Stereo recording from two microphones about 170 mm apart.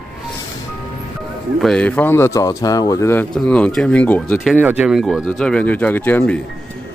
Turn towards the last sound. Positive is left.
turn(degrees=10)  # may be behind; listen again after turning